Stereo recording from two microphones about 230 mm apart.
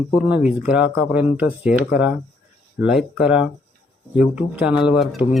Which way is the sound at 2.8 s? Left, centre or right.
Centre.